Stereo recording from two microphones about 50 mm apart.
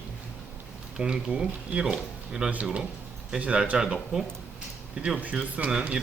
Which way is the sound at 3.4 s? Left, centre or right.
Right.